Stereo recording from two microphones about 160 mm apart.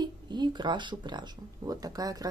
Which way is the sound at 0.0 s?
25° right (ahead or behind).